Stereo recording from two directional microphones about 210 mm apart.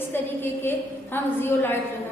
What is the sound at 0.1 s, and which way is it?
A woman's voice, 10° left (ahead or behind).